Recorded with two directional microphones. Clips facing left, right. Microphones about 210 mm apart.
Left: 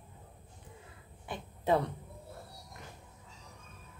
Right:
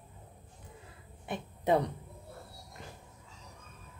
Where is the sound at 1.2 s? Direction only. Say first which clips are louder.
Right 2 dB; 20° right (ahead or behind).